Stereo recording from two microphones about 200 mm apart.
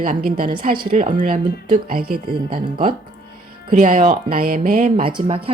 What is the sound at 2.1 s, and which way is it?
Speech, 25° right (ahead or behind).